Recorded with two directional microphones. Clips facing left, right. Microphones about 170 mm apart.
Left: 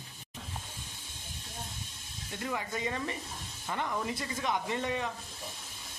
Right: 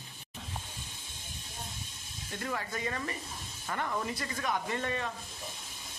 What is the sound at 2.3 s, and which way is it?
Speech, 15° left (ahead or behind).